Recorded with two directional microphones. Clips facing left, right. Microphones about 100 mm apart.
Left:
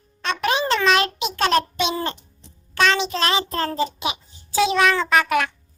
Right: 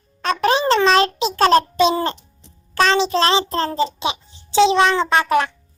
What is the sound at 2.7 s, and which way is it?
Child singing, 35° right (ahead or behind).